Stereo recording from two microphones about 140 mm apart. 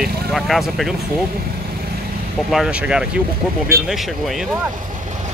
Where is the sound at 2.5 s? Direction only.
5° right (ahead or behind).